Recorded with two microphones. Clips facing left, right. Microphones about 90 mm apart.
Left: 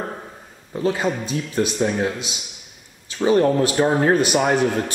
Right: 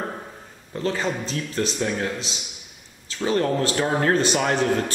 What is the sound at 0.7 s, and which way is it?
A man's voice, 10° left (ahead or behind).